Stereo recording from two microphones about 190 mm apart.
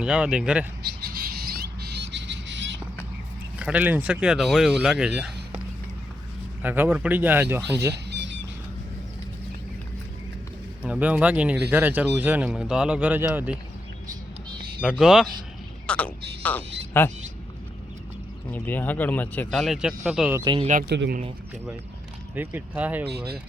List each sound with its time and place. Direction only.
0.0 s speech: 5° right (ahead or behind)
0.9 s a sound: 55° right (ahead or behind); by 2.6 s 70° right (ahead or behind)
3.6 s speech: 5° right (ahead or behind)
6.6 s speech: 10° right (ahead or behind)
7.9 s a sound: 65° right (ahead or behind)
10.8 s speech: 5° right (ahead or behind)
14.8 s speech: 5° right (ahead or behind)
18.5 s speech: 10° left (ahead or behind); by 20.4 s 5° right (ahead or behind)
20.4 s speech: 25° right (ahead or behind)
20.7 s speech: 45° right (ahead or behind)
20.9 s speech: 65° right (ahead or behind)
22.4 s speech: 10° right (ahead or behind)
23.0 s speech: 55° right (ahead or behind)